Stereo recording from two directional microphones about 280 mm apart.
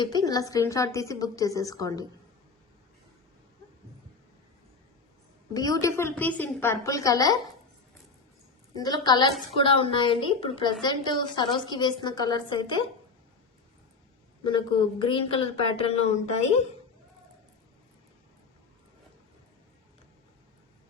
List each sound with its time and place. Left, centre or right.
0.0 s a woman's voice: centre
5.5 s a woman's voice: centre
8.7 s a woman's voice: centre
14.4 s a woman's voice: centre